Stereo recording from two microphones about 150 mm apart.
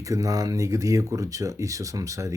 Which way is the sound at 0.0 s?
20° right (ahead or behind).